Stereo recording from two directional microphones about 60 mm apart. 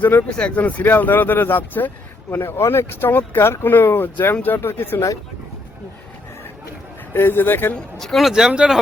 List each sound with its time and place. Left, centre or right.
0.0 s speech: left
0.3 s speech: centre; by 5.0 s left
7.1 s speech: left
7.9 s speech: centre
8.3 s speech: centre